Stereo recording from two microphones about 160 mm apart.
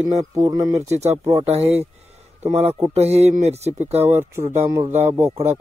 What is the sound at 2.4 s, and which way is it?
Speech, 40° right (ahead or behind).